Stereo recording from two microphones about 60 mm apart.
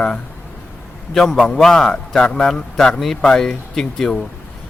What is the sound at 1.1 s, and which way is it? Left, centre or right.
A man's voice, centre.